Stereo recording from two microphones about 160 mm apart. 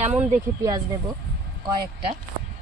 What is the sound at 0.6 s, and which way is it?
Speech, 25° right (ahead or behind).